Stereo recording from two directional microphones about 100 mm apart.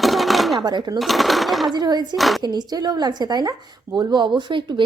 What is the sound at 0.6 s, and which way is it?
Speech, 45° right (ahead or behind).